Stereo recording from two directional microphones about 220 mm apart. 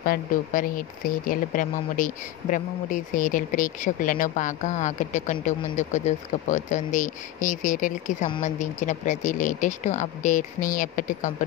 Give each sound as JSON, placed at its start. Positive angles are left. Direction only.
{"t": 0.0, "sound": "speech", "side_deg": 40}